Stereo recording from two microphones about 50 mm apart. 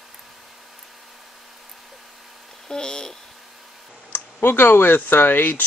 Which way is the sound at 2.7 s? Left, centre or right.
Centre.